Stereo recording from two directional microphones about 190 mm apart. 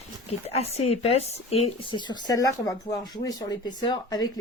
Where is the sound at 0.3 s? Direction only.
35° left (ahead or behind).